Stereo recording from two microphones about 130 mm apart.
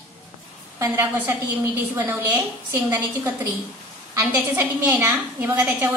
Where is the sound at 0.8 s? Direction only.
20° right (ahead or behind).